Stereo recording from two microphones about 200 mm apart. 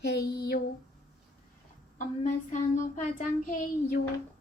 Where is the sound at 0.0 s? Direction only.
55° left (ahead or behind).